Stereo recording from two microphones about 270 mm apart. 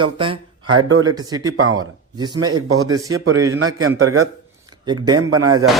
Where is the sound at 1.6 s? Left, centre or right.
Right.